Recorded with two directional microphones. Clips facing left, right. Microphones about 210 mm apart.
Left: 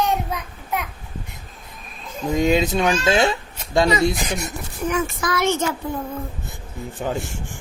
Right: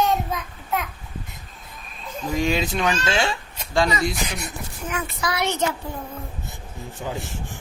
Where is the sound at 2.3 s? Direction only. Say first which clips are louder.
Left 5 dB; 20° left (ahead or behind).